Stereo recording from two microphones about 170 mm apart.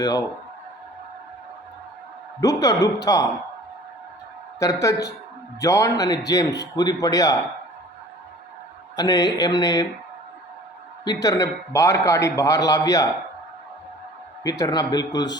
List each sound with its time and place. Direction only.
0.0 s a man's voice: 20° left (ahead or behind)
2.4 s a man's voice: 20° left (ahead or behind)
4.6 s a man's voice: 20° left (ahead or behind)
9.0 s a man's voice: 25° left (ahead or behind)
11.0 s a man's voice: 25° left (ahead or behind)
14.4 s a man's voice: 25° left (ahead or behind)